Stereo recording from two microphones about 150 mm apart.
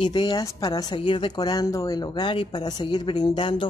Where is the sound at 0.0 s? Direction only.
30° left (ahead or behind).